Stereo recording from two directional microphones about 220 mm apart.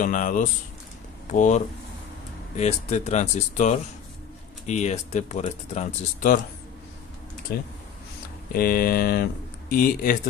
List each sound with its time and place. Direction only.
0.0 s speech: 35° left (ahead or behind)
7.5 s speech: 45° left (ahead or behind)